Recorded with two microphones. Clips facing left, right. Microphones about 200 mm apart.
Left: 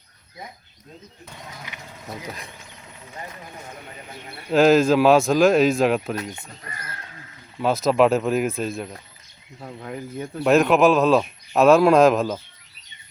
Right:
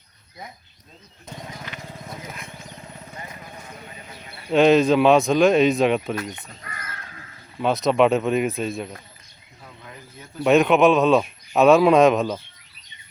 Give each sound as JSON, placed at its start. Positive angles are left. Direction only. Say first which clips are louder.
{"t": 4.5, "sound": "speech", "louder": "even", "side_deg": 0}
{"t": 7.6, "sound": "speech", "louder": "even", "side_deg": 0}
{"t": 9.6, "sound": "speech", "louder": "left 11 dB", "side_deg": 55}
{"t": 10.4, "sound": "speech", "louder": "even", "side_deg": 0}